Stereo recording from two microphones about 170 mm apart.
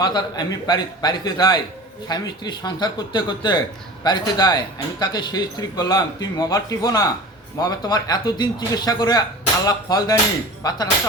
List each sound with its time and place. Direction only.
0.0 s speech: 25° left (ahead or behind)